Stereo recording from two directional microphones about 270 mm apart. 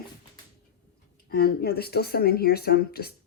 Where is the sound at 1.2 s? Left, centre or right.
Left.